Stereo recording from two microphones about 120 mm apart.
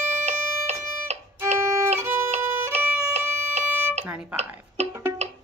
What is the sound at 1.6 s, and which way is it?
Violin, 25° right (ahead or behind).